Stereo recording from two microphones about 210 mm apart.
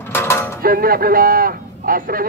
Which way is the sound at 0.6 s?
45° right (ahead or behind).